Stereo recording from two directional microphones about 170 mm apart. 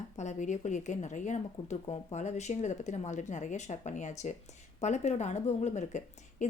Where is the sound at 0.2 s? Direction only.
45° left (ahead or behind).